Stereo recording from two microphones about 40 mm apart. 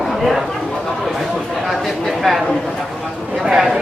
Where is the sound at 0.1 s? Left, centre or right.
Centre.